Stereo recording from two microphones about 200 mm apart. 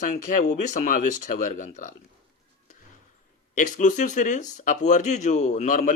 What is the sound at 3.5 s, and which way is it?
Speech, 40° left (ahead or behind).